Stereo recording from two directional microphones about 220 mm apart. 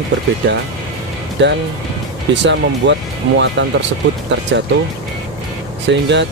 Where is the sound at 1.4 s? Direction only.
55° right (ahead or behind).